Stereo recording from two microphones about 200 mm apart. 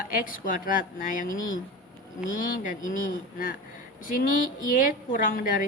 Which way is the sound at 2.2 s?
40° left (ahead or behind).